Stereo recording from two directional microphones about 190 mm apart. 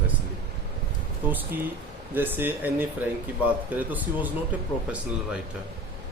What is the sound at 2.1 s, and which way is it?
Speech, 10° right (ahead or behind).